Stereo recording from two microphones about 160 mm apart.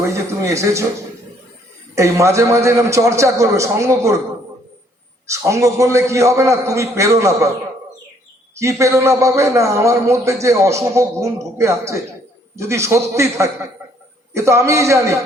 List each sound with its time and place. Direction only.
0.0 s a man's voice: 20° right (ahead or behind)
2.0 s a man's voice: 20° right (ahead or behind)
5.3 s a man's voice: 20° right (ahead or behind)
8.5 s a man's voice: 20° right (ahead or behind)